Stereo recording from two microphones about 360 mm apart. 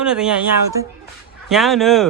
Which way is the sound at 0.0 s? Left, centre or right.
Centre.